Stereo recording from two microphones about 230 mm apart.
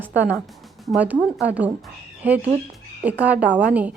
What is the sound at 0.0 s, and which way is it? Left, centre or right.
A woman's voice, centre.